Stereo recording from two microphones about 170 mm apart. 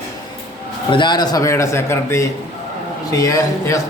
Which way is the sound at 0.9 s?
25° left (ahead or behind).